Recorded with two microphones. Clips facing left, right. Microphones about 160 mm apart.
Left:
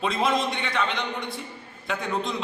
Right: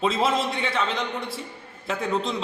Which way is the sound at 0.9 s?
5° right (ahead or behind).